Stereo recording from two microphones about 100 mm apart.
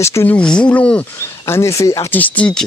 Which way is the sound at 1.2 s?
30° left (ahead or behind).